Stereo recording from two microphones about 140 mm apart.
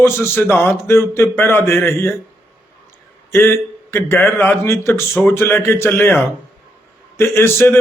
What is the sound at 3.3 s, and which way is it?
A man's voice, 15° left (ahead or behind).